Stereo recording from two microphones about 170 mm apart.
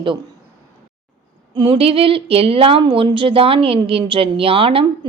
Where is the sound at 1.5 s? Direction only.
30° right (ahead or behind).